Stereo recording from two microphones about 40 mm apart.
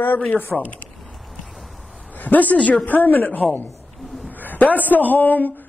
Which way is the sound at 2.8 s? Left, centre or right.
Left.